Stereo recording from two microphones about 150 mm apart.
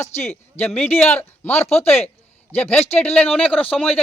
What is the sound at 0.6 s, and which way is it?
A man's voice, 10° left (ahead or behind).